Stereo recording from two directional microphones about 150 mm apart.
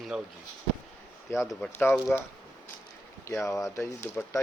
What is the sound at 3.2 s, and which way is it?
Speech, 20° left (ahead or behind).